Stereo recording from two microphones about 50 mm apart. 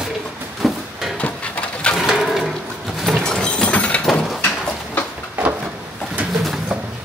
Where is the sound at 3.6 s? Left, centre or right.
Left.